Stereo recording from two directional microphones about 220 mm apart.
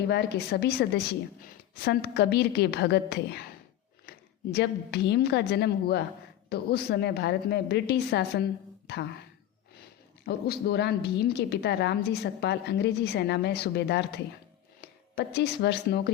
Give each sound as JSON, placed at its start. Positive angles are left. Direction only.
{"t": 0.1, "sound": "a woman's voice", "side_deg": 50}
{"t": 4.5, "sound": "a woman's voice", "side_deg": 50}
{"t": 10.2, "sound": "a woman's voice", "side_deg": 45}